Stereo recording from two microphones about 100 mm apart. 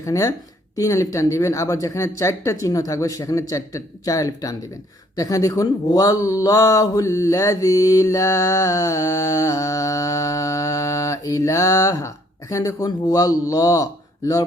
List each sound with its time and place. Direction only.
0.0 s speech: 35° left (ahead or behind)